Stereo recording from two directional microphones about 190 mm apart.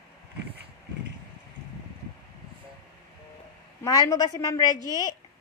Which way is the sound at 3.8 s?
20° left (ahead or behind).